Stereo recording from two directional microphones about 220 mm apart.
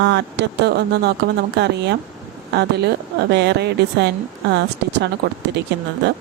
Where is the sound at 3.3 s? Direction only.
50° right (ahead or behind).